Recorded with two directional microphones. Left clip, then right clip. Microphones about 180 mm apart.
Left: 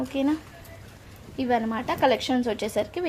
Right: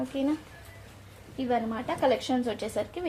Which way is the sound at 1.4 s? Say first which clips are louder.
Left 4 dB; 35° left (ahead or behind).